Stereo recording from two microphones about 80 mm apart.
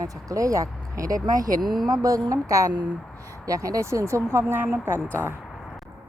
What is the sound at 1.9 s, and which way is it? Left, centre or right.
A woman's voice, right.